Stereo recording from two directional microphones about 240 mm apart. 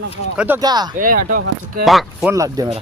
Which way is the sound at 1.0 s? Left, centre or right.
Right.